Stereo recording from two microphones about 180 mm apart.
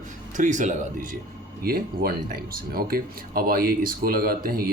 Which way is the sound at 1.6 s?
55° right (ahead or behind).